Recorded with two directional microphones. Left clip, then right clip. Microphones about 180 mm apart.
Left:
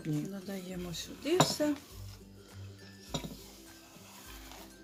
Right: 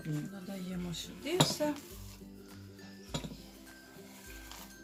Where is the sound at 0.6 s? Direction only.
40° left (ahead or behind).